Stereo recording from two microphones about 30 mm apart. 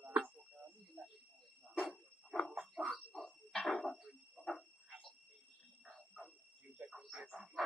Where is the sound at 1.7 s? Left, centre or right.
Centre.